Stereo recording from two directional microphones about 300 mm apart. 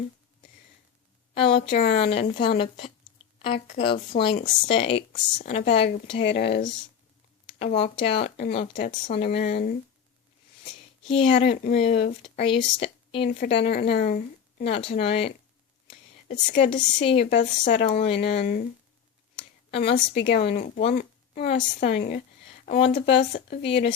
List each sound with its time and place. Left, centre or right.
1.3 s a woman's voice: centre
1.7 s a woman's voice: left
2.0 s speech: centre
6.2 s a woman's voice: left
7.6 s speech: centre
11.1 s speech: centre
13.6 s a woman's voice: left
16.3 s speech: left
16.7 s a woman's voice: left
19.9 s speech: left